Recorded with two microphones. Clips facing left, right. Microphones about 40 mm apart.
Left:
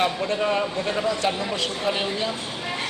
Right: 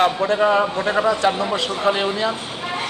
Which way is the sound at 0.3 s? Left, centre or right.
Right.